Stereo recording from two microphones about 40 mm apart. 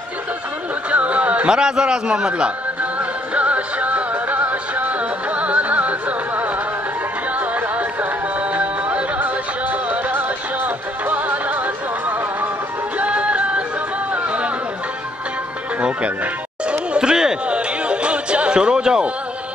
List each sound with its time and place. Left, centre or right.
0.8 s music: right
1.5 s a man's voice: centre
2.8 s music: right
12.9 s music: right
14.1 s chatter: right
16.6 s chatter: right
17.5 s music: right